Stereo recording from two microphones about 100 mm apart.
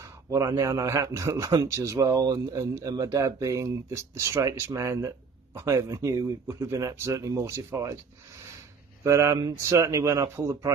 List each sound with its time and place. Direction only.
0.0 s speech: 35° right (ahead or behind)
9.0 s speech: 30° right (ahead or behind)